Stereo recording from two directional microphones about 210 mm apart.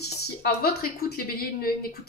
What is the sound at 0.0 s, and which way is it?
A woman's voice, 45° left (ahead or behind).